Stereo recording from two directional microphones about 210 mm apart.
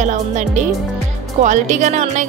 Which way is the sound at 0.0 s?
35° right (ahead or behind).